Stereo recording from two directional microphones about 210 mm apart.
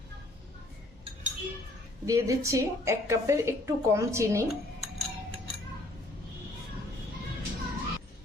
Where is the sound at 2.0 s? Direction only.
15° right (ahead or behind).